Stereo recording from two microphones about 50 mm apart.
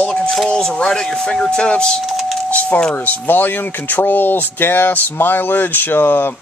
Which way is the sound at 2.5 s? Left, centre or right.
Left.